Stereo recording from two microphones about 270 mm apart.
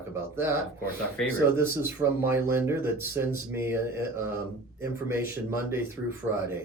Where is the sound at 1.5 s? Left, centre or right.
Centre.